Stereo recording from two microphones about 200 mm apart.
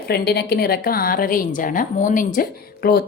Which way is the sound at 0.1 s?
50° left (ahead or behind).